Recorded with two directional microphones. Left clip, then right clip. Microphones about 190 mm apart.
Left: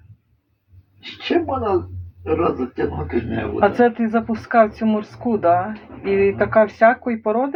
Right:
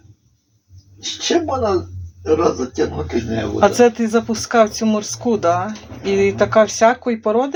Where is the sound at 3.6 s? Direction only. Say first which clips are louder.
Right 3 dB; 20° right (ahead or behind).